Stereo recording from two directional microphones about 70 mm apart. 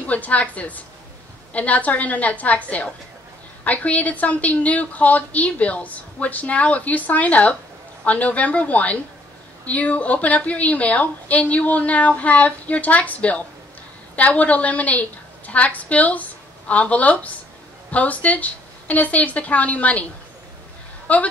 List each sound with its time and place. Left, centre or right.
0.0 s a woman's voice: left
21.1 s a woman's voice: centre